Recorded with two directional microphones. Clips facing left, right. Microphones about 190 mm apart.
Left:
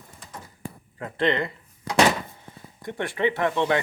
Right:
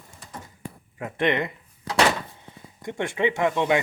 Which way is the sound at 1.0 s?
20° right (ahead or behind).